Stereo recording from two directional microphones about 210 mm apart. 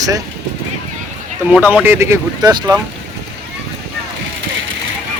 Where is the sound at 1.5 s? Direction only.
5° right (ahead or behind).